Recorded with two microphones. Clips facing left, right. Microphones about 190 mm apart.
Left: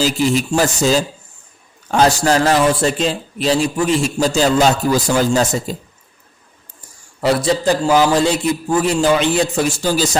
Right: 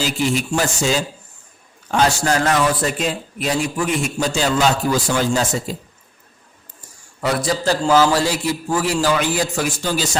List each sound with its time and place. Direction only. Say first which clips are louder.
0.0 s a man's voice: left 4 dB; 40° left (ahead or behind)
7.2 s a man's voice: left 5 dB; 30° left (ahead or behind)